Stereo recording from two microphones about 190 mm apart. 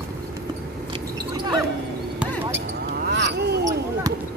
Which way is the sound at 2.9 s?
65° right (ahead or behind).